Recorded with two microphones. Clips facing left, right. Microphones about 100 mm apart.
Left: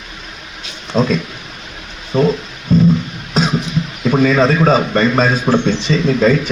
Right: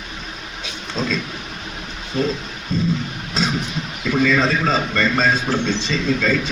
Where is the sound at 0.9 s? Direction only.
50° left (ahead or behind).